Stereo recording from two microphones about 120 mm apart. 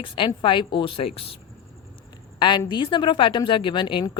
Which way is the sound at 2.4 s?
40° left (ahead or behind).